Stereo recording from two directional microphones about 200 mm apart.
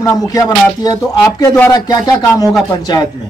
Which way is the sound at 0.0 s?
15° left (ahead or behind).